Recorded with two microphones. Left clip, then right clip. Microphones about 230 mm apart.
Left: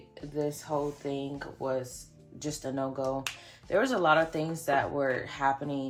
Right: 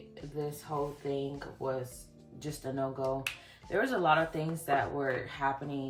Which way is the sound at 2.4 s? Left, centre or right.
Left.